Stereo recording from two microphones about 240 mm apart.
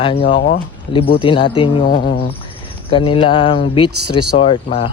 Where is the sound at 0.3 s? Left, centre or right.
Left.